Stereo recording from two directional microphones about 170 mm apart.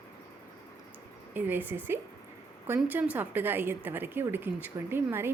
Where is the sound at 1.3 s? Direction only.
10° right (ahead or behind).